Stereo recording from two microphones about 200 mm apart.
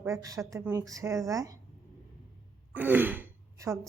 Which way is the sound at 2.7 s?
10° right (ahead or behind).